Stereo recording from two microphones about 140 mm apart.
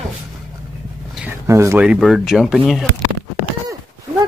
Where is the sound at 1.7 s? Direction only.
5° right (ahead or behind).